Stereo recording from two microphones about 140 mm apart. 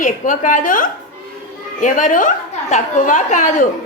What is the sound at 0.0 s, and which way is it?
A woman's voice, 70° left (ahead or behind).